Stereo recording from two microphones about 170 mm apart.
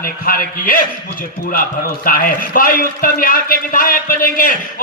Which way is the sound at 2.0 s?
60° left (ahead or behind).